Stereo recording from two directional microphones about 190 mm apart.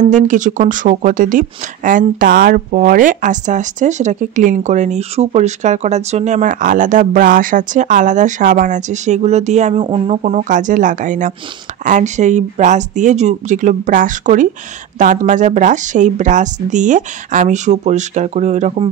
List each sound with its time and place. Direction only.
0.1 s speech: 40° right (ahead or behind)